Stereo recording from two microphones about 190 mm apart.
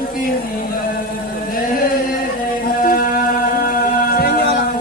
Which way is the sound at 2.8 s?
50° left (ahead or behind).